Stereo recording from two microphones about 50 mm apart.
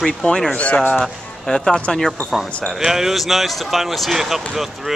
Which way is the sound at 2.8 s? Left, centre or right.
Centre.